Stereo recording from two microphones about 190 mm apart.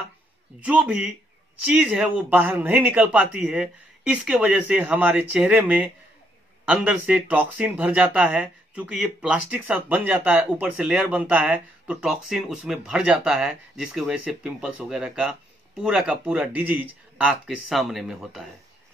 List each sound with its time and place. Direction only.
0.6 s speech: 5° right (ahead or behind)